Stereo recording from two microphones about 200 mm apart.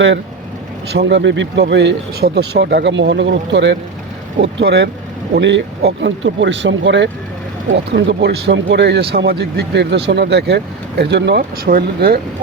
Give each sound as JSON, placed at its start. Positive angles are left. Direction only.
{"t": 0.9, "sound": "speech", "side_deg": -55}